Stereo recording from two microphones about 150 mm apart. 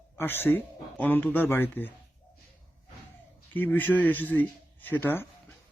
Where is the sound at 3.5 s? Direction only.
10° left (ahead or behind).